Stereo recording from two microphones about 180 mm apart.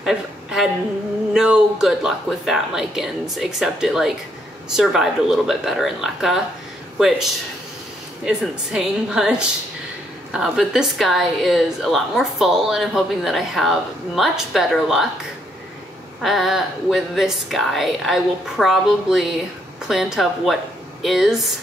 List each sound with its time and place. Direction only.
0.0 s a sound: 5° right (ahead or behind)
1.3 s a woman's voice: 5° right (ahead or behind)
8.3 s a woman's voice: 5° right (ahead or behind)
16.2 s a woman's voice: centre (ahead or behind)